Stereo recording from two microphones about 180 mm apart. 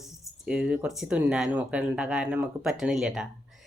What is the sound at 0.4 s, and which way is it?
Speech, 5° right (ahead or behind).